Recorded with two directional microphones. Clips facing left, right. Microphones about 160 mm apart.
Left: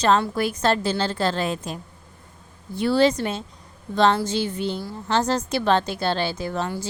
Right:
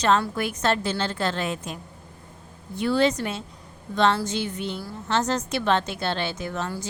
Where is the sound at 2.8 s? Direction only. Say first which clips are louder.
Left 3 dB; 35° left (ahead or behind).